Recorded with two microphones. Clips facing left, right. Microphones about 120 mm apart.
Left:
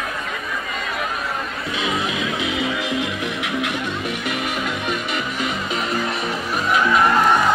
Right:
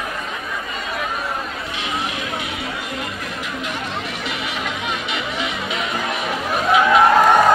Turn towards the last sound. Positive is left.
turn(degrees=-60)  # may be behind; listen again after turning